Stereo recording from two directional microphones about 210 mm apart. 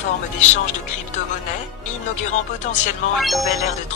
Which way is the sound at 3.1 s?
Centre (ahead or behind).